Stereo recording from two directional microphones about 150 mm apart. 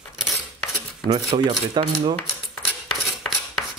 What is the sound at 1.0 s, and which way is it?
Speech, 30° right (ahead or behind).